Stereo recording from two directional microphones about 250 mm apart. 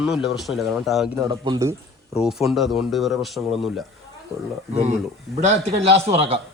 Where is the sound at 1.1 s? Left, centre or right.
Centre.